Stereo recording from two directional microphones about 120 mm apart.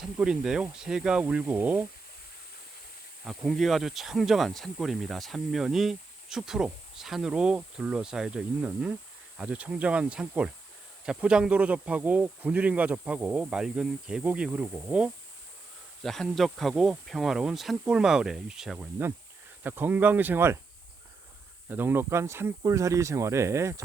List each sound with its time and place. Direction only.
0.0 s speech: 5° right (ahead or behind)
3.2 s speech: centre (ahead or behind)
16.0 s speech: centre (ahead or behind)
19.6 s speech: 15° right (ahead or behind)
21.7 s speech: 15° right (ahead or behind)